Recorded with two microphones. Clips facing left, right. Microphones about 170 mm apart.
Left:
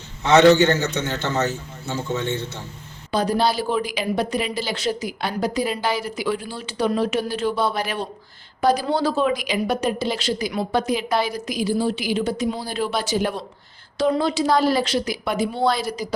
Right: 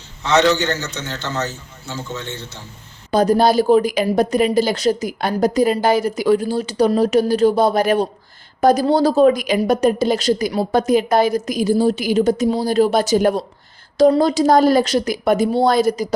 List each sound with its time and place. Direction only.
0.3 s a man's voice: 55° left (ahead or behind)
3.1 s speech: 45° right (ahead or behind)